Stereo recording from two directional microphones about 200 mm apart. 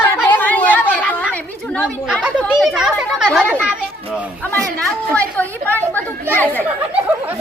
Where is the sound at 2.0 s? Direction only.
5° right (ahead or behind).